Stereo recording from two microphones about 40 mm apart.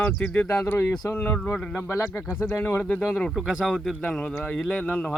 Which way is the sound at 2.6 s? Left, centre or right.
Left.